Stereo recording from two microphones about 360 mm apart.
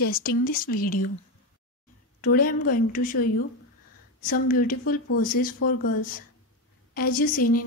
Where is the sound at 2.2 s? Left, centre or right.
Left.